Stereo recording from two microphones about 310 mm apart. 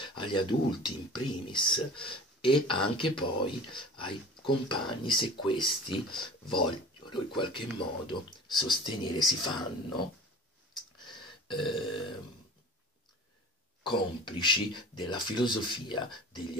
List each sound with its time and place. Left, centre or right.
0.0 s speech: centre
11.1 s burping: centre
13.8 s speech: centre